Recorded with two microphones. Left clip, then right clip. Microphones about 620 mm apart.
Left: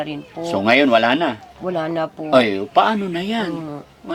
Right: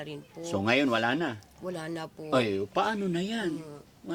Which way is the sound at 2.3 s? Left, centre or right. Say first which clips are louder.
Left 12 dB; right.